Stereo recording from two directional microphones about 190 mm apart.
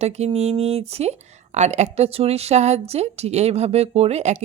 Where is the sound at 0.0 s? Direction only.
35° right (ahead or behind).